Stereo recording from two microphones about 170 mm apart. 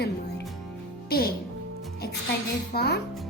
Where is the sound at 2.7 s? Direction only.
70° left (ahead or behind).